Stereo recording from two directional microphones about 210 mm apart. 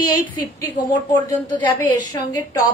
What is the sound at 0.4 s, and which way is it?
A woman's voice, 20° left (ahead or behind).